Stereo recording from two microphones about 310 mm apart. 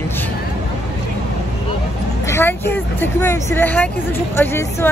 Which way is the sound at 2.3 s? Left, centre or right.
Centre.